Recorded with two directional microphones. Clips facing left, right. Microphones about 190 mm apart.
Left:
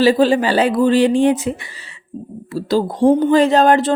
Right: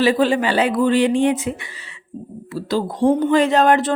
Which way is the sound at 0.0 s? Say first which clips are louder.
Left 3 dB; 35° left (ahead or behind).